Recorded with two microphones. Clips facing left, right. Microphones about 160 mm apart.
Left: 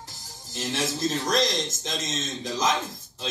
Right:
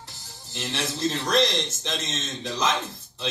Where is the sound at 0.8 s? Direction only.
40° left (ahead or behind).